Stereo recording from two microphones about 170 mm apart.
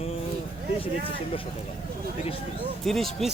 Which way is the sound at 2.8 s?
Centre (ahead or behind).